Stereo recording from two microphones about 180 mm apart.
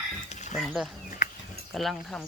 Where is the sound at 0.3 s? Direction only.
40° left (ahead or behind).